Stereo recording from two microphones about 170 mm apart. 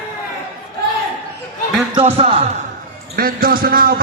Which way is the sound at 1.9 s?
35° right (ahead or behind).